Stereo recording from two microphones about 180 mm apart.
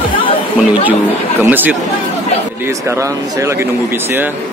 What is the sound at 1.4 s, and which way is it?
Speech, 10° right (ahead or behind).